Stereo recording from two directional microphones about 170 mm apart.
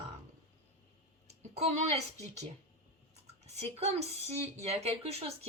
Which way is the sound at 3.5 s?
40° right (ahead or behind).